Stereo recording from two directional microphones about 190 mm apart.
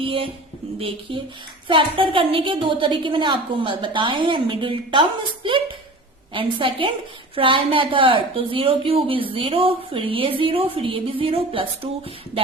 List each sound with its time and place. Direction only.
0.0 s a woman's voice: 30° right (ahead or behind)